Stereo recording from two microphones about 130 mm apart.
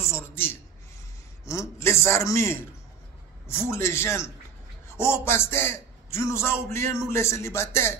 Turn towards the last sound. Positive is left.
turn(degrees=20)  # may be behind; listen again after turning